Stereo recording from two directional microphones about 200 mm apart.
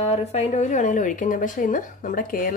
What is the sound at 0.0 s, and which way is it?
Speech, 30° left (ahead or behind).